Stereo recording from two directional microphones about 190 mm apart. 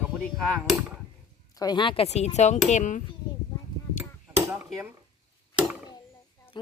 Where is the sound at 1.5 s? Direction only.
20° left (ahead or behind); by 3.0 s 40° left (ahead or behind).